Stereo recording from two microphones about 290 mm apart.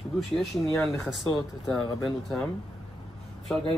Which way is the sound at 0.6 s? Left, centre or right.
Centre.